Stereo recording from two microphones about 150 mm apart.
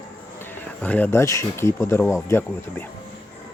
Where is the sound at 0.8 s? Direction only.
10° left (ahead or behind).